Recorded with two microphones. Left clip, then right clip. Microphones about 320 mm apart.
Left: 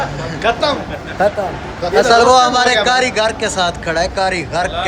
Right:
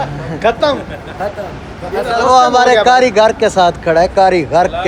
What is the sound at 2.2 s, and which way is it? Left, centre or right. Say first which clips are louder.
Speech: right 2 dB; centre.